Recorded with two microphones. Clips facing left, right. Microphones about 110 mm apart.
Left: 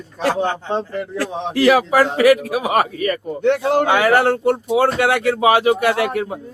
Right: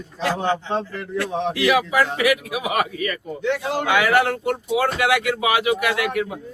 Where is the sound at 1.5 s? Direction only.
40° left (ahead or behind).